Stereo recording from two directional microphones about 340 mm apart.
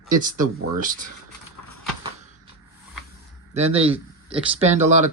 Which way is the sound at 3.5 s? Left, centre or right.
Centre.